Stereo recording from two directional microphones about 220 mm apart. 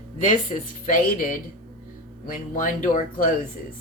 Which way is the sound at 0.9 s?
40° left (ahead or behind).